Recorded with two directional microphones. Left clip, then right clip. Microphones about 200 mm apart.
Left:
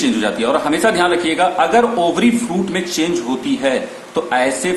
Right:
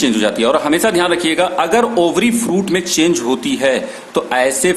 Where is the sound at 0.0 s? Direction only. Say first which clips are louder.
Right 3 dB; 55° right (ahead or behind).